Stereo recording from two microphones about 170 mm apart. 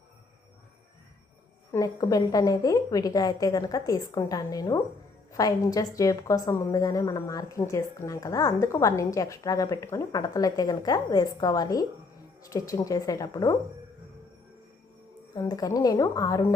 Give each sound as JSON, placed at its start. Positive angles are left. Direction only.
{"t": 1.7, "sound": "a woman's voice", "side_deg": 20}
{"t": 15.4, "sound": "a woman's voice", "side_deg": 20}